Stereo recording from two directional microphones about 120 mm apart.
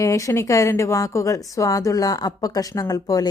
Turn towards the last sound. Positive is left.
turn(degrees=30)  # may be behind; listen again after turning